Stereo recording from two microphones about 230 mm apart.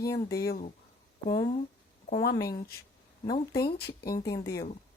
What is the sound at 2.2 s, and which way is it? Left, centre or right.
Speech, left.